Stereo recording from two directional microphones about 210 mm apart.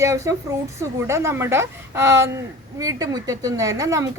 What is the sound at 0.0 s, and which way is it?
Speech, 15° right (ahead or behind).